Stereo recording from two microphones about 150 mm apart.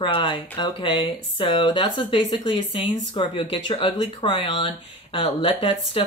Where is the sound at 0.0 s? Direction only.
35° left (ahead or behind).